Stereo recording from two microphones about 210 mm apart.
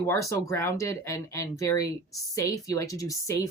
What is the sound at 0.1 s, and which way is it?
Speech, 15° left (ahead or behind).